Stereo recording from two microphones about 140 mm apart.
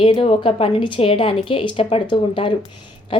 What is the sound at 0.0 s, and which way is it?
A woman's voice, 40° left (ahead or behind).